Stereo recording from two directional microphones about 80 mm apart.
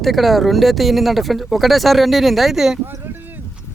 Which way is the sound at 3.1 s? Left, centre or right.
Right.